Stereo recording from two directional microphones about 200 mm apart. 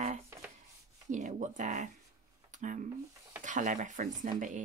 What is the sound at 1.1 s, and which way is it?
Speech, 40° right (ahead or behind).